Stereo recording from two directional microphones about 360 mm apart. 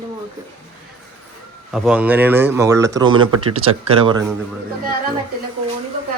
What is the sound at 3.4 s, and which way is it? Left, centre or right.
Speech, right.